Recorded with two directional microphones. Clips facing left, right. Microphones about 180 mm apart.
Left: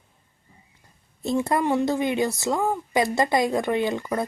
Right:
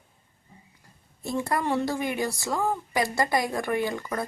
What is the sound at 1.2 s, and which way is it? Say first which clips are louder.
A woman's voice: left 5 dB; 20° left (ahead or behind).